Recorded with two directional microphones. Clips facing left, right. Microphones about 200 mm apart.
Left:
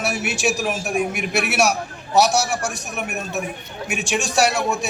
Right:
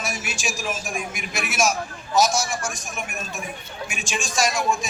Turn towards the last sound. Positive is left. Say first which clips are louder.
# left 4 dB
turn(degrees=65)  # may be behind; listen again after turning